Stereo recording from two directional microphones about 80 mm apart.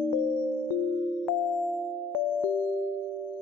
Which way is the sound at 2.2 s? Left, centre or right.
Centre.